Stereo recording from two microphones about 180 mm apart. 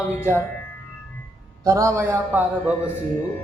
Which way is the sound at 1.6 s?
15° right (ahead or behind).